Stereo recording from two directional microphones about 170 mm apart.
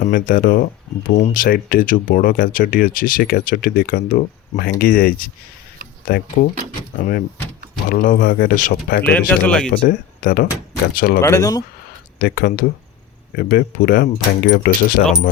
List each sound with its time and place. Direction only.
0.0 s speech: 60° left (ahead or behind)
6.9 s speech: 55° left (ahead or behind)
9.0 s speech: 10° left (ahead or behind)
9.8 s speech: 60° left (ahead or behind)
11.2 s speech: 15° left (ahead or behind)
12.2 s speech: 60° left (ahead or behind)